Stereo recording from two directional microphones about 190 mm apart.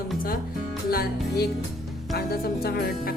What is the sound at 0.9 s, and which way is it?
A woman's voice, 55° left (ahead or behind).